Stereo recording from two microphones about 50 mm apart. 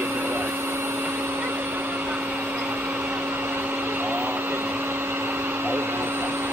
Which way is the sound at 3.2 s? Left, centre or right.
Right.